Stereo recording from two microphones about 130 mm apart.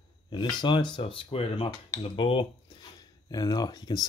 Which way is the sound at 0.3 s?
35° left (ahead or behind).